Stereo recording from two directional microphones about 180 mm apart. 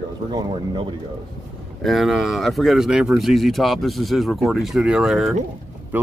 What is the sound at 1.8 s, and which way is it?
Speech, centre (ahead or behind).